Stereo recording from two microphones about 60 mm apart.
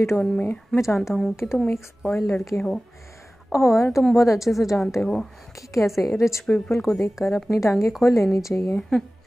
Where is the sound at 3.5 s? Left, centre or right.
Left.